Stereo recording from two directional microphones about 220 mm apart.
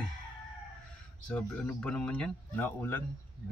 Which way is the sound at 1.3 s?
5° left (ahead or behind).